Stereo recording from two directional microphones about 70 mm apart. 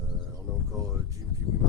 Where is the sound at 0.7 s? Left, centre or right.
Right.